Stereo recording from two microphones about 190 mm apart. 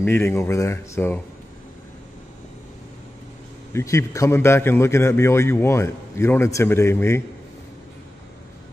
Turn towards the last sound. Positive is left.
turn(degrees=15)  # may be behind; listen again after turning